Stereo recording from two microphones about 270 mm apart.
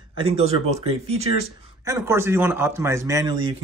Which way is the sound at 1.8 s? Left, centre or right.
Centre.